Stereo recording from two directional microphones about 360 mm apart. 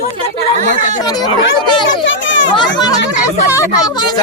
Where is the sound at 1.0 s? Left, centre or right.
Centre.